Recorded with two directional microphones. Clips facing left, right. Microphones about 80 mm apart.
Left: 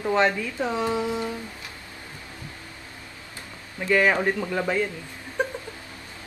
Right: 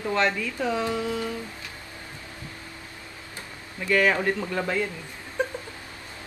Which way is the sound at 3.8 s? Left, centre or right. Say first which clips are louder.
Left 1 dB; centre.